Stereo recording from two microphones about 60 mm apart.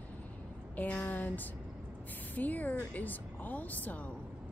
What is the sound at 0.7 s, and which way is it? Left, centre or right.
A woman's voice, left.